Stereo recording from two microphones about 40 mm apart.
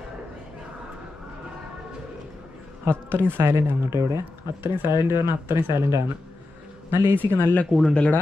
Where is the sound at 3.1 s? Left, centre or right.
Right.